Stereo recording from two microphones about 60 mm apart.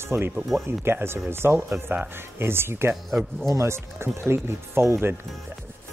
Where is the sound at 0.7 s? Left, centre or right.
Right.